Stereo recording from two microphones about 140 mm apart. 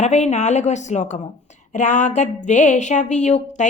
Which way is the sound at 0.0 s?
55° left (ahead or behind).